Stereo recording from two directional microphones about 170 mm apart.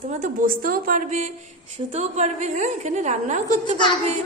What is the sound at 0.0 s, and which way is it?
A woman's voice, 50° right (ahead or behind).